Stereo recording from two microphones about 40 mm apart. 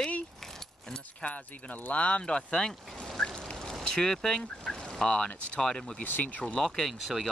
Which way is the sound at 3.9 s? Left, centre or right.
Centre.